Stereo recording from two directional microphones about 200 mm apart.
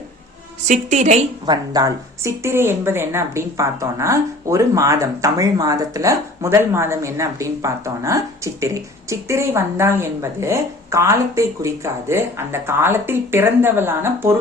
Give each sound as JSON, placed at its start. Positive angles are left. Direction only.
{"t": 0.7, "sound": "a woman's voice", "side_deg": -35}
{"t": 1.5, "sound": "speech", "side_deg": -20}